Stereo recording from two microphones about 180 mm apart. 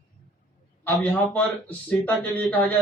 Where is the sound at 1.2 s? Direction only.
10° left (ahead or behind).